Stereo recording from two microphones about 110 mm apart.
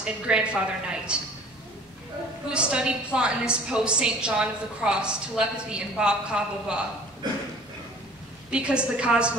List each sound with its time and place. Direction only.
0.0 s a woman's voice: 10° right (ahead or behind)
2.5 s a woman's voice: 10° right (ahead or behind)
7.2 s a sound: 40° right (ahead or behind)
8.5 s a woman's voice: 10° right (ahead or behind)